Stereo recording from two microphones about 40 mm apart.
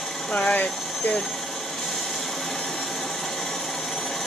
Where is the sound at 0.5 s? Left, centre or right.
Left.